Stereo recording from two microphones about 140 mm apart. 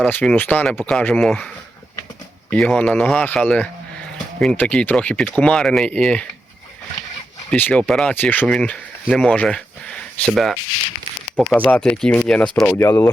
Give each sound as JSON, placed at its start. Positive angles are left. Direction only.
{"t": 0.0, "sound": "speech", "side_deg": 10}
{"t": 2.5, "sound": "speech", "side_deg": 5}
{"t": 7.5, "sound": "speech", "side_deg": 10}